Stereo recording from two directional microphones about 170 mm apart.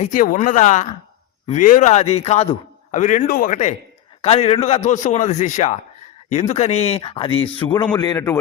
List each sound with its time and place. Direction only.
0.0 s a man's voice: 50° left (ahead or behind); by 8.4 s 20° left (ahead or behind)